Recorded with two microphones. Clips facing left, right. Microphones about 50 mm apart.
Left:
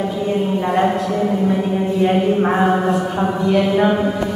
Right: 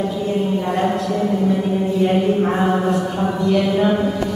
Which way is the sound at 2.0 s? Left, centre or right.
Left.